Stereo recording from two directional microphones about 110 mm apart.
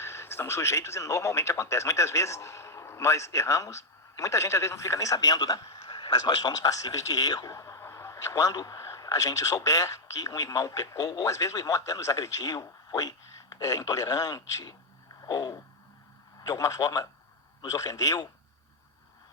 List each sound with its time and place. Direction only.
0.0 s speech: 25° left (ahead or behind)
15.2 s a sound: 35° left (ahead or behind)
16.4 s a man's voice: 30° left (ahead or behind)